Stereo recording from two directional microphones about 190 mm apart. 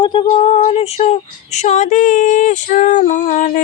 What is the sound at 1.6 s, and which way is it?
Female singing, 40° left (ahead or behind).